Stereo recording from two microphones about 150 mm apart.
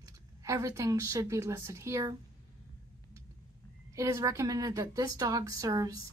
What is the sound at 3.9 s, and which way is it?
A woman's voice, 20° right (ahead or behind).